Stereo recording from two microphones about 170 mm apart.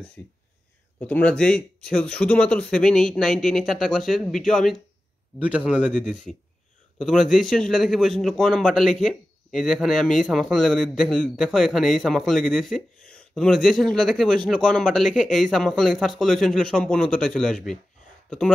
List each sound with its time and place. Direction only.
0.2 s a man's voice: 15° left (ahead or behind)